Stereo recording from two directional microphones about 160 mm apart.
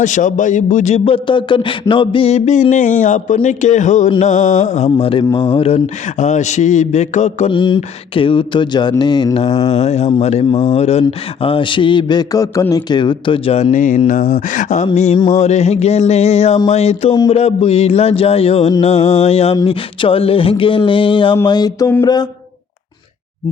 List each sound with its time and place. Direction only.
0.0 s a man's voice: 50° left (ahead or behind)
7.5 s mantra: 30° left (ahead or behind)
9.4 s a man's voice: 40° left (ahead or behind)
21.4 s mantra: 25° left (ahead or behind)